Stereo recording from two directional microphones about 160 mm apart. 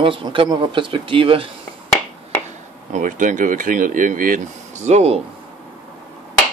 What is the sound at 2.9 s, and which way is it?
Speech, 50° right (ahead or behind).